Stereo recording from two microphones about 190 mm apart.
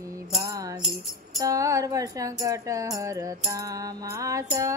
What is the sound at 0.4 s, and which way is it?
Music, 15° right (ahead or behind).